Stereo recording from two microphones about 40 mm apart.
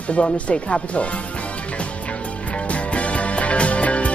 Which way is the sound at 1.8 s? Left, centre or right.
Left.